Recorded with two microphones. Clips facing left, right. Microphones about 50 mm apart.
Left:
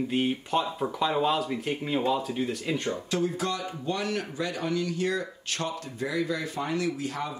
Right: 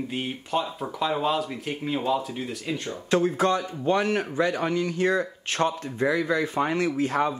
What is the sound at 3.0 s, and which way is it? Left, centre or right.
A man's voice, right.